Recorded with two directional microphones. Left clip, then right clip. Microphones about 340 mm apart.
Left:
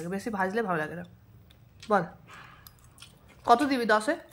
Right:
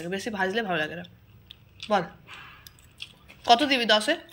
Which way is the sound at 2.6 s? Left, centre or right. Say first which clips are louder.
Right 9 dB; centre.